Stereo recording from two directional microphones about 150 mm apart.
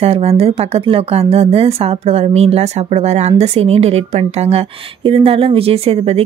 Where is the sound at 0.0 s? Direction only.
40° right (ahead or behind).